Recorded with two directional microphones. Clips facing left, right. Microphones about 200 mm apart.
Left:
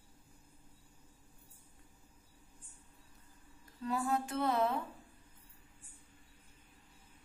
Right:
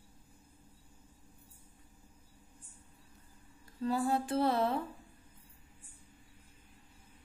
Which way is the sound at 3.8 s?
30° right (ahead or behind).